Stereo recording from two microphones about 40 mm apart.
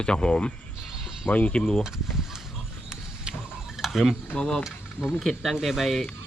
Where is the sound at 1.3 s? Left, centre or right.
Left.